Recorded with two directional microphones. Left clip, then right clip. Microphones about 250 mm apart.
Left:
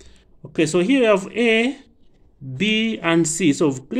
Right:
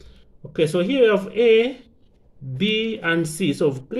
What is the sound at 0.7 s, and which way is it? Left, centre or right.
Speech, left.